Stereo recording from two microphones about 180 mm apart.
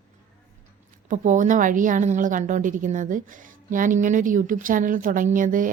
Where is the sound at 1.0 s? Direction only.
45° right (ahead or behind).